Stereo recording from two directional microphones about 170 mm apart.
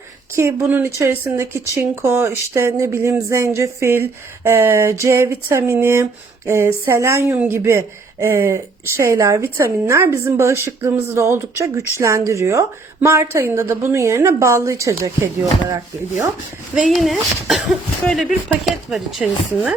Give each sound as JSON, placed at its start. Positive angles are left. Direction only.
{"t": 0.3, "sound": "speech", "side_deg": -15}
{"t": 16.9, "sound": "speech", "side_deg": 0}